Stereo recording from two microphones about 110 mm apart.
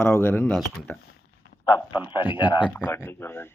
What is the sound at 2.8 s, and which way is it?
Speech, 20° left (ahead or behind).